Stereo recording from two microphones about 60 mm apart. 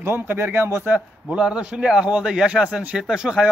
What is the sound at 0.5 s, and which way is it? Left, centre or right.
Speech, right.